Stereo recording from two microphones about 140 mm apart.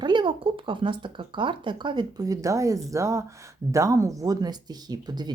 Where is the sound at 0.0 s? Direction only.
35° right (ahead or behind).